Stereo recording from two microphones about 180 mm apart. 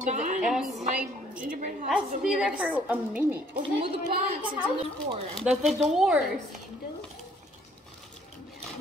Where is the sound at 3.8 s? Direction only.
30° right (ahead or behind).